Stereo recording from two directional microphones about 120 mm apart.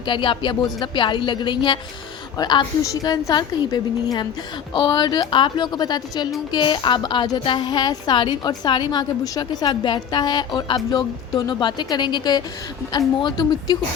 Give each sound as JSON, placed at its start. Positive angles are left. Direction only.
{"t": 0.0, "sound": "a woman's voice", "side_deg": 45}